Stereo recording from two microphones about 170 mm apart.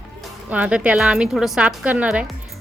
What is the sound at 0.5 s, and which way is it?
A woman's voice, 10° right (ahead or behind).